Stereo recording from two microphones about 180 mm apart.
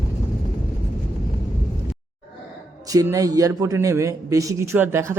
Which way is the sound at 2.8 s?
20° right (ahead or behind).